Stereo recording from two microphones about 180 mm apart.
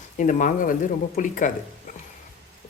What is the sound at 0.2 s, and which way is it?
Speech, 45° left (ahead or behind).